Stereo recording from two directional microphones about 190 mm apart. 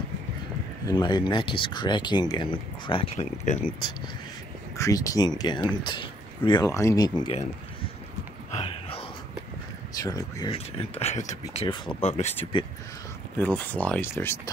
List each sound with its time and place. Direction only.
0.8 s speech: 20° left (ahead or behind)
4.7 s speech: 15° left (ahead or behind)
8.5 s a sound: 30° left (ahead or behind)
9.9 s speech: 20° left (ahead or behind)
10.5 s speech: 35° left (ahead or behind)
13.4 s speech: 10° left (ahead or behind)